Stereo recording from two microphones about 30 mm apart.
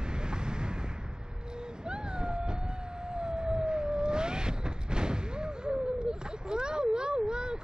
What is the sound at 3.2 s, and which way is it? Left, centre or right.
Vehicle, right.